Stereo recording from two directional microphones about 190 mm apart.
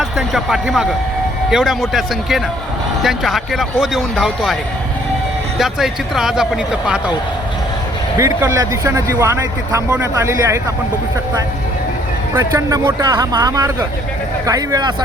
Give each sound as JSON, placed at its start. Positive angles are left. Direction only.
{"t": 0.0, "sound": "speech", "side_deg": 0}
{"t": 5.5, "sound": "speech", "side_deg": 0}
{"t": 8.2, "sound": "speech", "side_deg": -15}
{"t": 12.3, "sound": "speech", "side_deg": -15}